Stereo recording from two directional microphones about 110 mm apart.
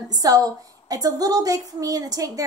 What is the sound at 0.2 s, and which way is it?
A woman's voice, 35° right (ahead or behind).